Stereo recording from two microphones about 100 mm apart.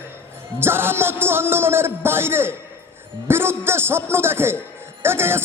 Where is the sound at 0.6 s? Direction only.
25° right (ahead or behind).